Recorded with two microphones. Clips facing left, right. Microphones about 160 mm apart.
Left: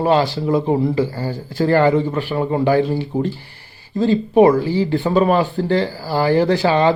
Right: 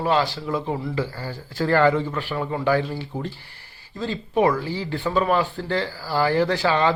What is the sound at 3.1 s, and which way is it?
Speech, 15° left (ahead or behind).